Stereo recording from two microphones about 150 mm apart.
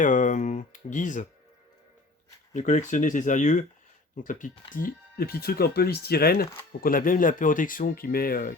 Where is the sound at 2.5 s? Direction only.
55° left (ahead or behind); by 6.5 s 90° left.